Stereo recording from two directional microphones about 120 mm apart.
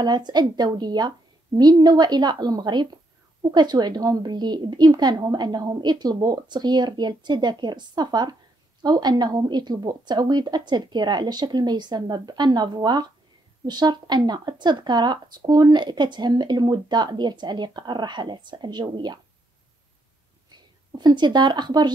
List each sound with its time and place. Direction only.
0.0 s speech: 35° right (ahead or behind)
20.5 s speech: 40° right (ahead or behind)